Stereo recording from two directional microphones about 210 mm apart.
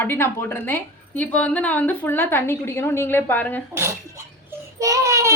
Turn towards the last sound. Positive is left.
turn(degrees=-15)  # may be behind; listen again after turning